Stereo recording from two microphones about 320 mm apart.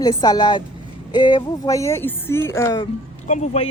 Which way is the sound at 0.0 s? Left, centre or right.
Centre.